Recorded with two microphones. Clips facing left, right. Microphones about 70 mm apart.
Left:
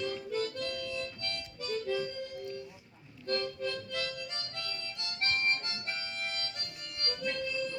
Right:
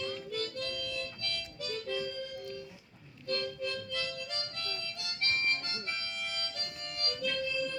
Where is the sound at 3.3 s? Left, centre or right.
Left.